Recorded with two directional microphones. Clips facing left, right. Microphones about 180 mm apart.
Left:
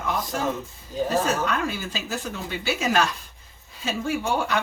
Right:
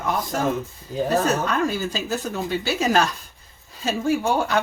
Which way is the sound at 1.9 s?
40° right (ahead or behind).